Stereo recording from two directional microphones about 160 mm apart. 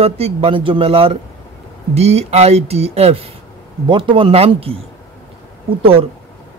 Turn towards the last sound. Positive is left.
turn(degrees=-35)  # may be behind; listen again after turning